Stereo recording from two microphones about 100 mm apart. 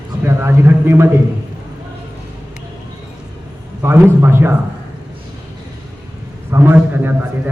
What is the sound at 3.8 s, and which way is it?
Speech, 25° right (ahead or behind).